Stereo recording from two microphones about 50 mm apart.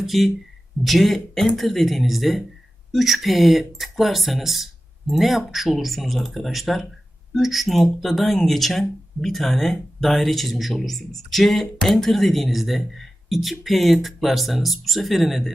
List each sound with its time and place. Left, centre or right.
0.0 s speech: centre